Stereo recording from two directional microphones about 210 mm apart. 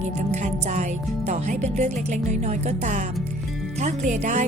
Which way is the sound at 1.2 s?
35° right (ahead or behind).